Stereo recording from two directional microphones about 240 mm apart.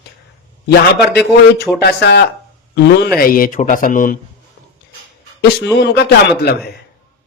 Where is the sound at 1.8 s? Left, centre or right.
Left.